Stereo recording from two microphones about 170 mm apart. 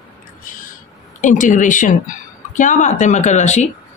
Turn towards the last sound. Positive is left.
turn(degrees=45)  # may be behind; listen again after turning